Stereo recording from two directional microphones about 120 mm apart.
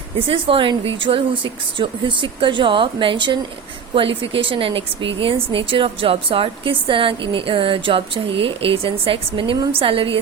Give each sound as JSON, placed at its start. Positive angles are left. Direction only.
{"t": 0.3, "sound": "a woman's voice", "side_deg": -45}